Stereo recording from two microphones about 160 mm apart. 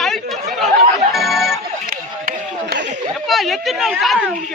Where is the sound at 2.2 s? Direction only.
70° right (ahead or behind).